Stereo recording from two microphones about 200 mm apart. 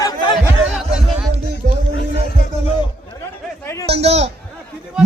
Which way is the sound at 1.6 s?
45° right (ahead or behind).